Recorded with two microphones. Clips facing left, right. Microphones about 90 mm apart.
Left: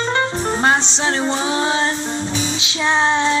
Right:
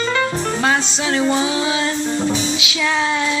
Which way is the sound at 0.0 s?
35° left (ahead or behind).